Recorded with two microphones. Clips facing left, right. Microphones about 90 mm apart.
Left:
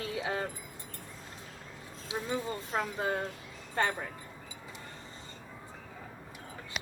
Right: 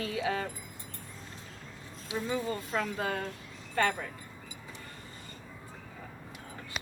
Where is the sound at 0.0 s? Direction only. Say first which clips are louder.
Right 2 dB; 25° left (ahead or behind).